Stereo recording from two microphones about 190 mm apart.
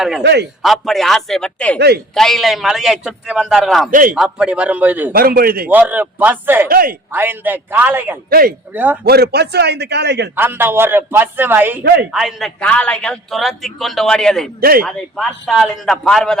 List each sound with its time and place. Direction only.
0.2 s a man's voice: 60° right (ahead or behind)
0.6 s a man's voice: centre (ahead or behind)
5.1 s a man's voice: 50° right (ahead or behind)
5.6 s a man's voice: 10° right (ahead or behind)
6.7 s a man's voice: 50° right (ahead or behind)
7.1 s a man's voice: 10° right (ahead or behind)
8.3 s a man's voice: 50° right (ahead or behind)
8.7 s a man's voice: 10° right (ahead or behind)
9.0 s a man's voice: 55° right (ahead or behind)
10.3 s a man's voice: 10° right (ahead or behind)
11.8 s a man's voice: 60° right (ahead or behind)
12.1 s a man's voice: centre (ahead or behind)
14.6 s a man's voice: 50° right (ahead or behind)
14.8 s a man's voice: centre (ahead or behind)